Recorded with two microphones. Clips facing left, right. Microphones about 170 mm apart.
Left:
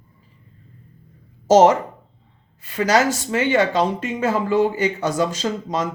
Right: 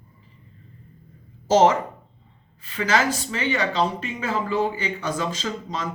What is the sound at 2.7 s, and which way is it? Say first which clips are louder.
Speech: left 4 dB; 45° left (ahead or behind).